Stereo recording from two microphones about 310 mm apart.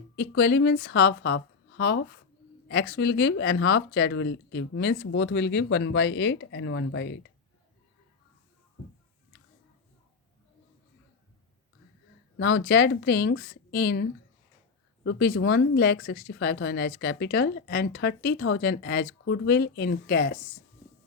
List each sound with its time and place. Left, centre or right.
0.2 s speech: left
12.4 s speech: left